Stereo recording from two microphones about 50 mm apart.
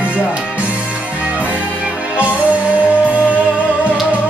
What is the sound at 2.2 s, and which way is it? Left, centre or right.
Music, right.